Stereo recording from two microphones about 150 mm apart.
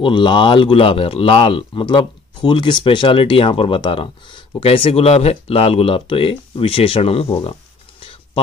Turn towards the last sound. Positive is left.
turn(degrees=40)  # may be behind; listen again after turning